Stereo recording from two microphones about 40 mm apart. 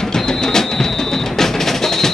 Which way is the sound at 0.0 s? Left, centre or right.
Centre.